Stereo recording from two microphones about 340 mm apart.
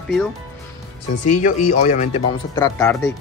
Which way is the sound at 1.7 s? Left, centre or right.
Left.